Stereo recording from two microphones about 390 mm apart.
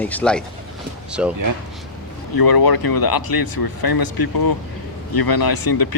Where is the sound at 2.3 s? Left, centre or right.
Left.